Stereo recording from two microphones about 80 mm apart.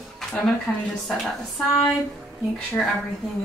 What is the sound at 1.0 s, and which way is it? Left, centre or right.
Speech, centre.